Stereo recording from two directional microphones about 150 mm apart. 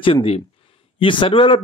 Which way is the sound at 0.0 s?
35° left (ahead or behind).